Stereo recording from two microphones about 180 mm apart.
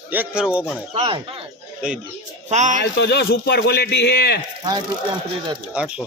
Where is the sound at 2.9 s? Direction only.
70° left (ahead or behind).